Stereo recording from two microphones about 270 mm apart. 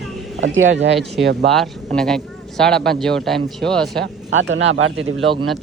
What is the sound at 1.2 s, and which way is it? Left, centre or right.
Speech, right.